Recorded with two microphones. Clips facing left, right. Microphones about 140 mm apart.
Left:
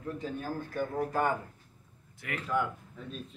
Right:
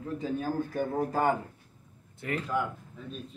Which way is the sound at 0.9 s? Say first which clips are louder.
Right 3 dB; 30° right (ahead or behind).